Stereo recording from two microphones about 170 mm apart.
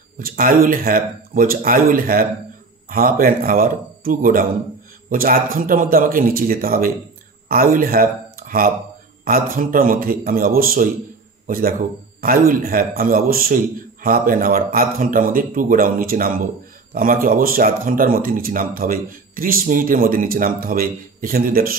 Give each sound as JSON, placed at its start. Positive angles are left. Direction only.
{"t": 0.2, "sound": "speech", "side_deg": -55}